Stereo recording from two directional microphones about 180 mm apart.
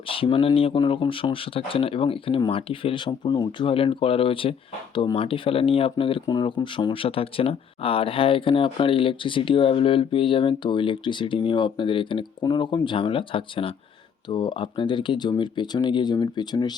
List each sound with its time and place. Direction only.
0.1 s speech: 30° left (ahead or behind)